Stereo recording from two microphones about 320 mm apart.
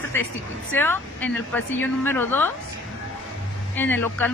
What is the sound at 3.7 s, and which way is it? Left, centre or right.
Speech, centre.